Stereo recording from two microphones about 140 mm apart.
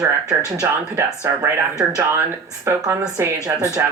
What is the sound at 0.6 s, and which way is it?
Speech, 20° right (ahead or behind).